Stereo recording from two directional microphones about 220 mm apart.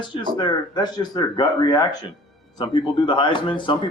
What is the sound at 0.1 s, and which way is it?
Speech, 20° left (ahead or behind).